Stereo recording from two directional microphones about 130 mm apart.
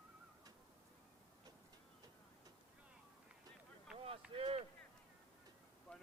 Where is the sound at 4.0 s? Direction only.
45° right (ahead or behind).